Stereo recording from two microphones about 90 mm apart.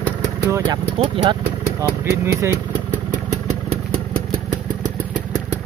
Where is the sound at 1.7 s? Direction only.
30° right (ahead or behind).